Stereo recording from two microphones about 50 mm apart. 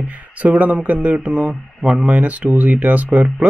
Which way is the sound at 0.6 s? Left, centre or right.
Right.